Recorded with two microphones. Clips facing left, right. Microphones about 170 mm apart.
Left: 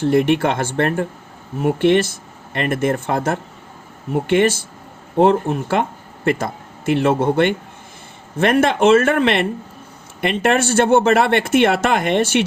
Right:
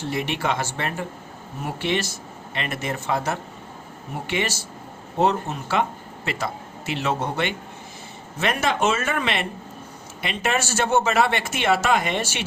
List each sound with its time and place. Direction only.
0.0 s a man's voice: 55° left (ahead or behind)